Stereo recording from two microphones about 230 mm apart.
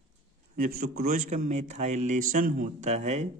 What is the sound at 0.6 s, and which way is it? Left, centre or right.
A man's voice, right.